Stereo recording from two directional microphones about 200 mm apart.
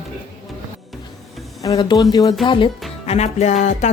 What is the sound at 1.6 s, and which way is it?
Speech, 20° left (ahead or behind).